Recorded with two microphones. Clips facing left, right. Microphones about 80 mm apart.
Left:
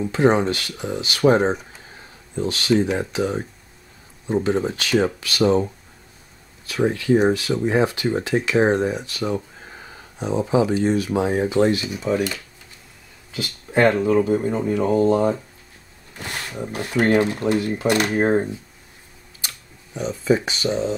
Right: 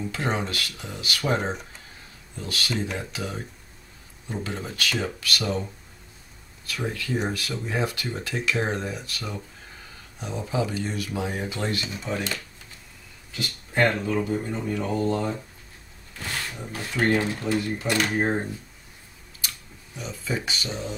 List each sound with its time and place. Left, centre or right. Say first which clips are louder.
0.0 s speech: left 10 dB; left
7.3 s speech: left 9 dB; left
16.2 s roaring cats: left 2 dB; centre
16.5 s speech: left 9 dB; left
20.0 s speech: left 11 dB; left